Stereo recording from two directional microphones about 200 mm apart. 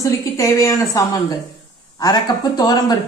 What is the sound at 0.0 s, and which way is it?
Speech, 15° left (ahead or behind).